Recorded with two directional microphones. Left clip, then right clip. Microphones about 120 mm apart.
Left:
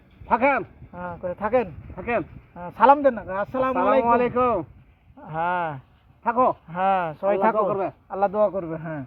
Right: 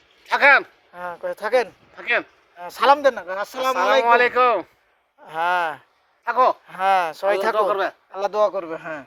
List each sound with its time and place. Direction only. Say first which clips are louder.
0.3 s speech: right 6 dB; 5° right (ahead or behind)
0.9 s speech: right 2 dB; 50° right (ahead or behind)
2.0 s speech: right 4 dB; 5° right (ahead or behind)
2.6 s speech: even; 45° right (ahead or behind)
4.0 s speech: right 4 dB; 5° right (ahead or behind)
5.2 s speech: right 4 dB; 45° right (ahead or behind)
6.2 s speech: right 3 dB; 5° right (ahead or behind)
6.7 s speech: right 3 dB; 45° right (ahead or behind)
7.7 s speech: right 4 dB; 5° right (ahead or behind)
8.1 s speech: even; 40° right (ahead or behind)